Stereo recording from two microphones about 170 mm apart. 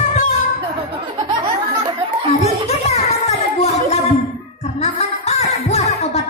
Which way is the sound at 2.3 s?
40° left (ahead or behind).